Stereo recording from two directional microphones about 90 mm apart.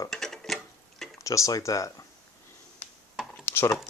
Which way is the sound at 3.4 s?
25° left (ahead or behind).